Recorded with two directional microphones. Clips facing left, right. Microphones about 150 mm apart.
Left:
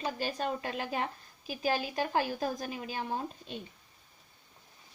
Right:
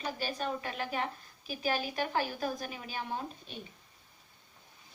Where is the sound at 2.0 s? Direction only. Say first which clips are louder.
Left 2 dB; 35° left (ahead or behind).